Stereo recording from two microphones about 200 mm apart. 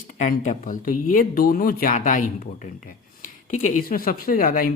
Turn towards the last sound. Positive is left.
turn(degrees=45)  # may be behind; listen again after turning